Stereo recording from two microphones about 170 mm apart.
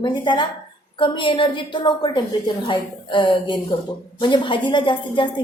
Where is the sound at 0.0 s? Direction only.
25° left (ahead or behind).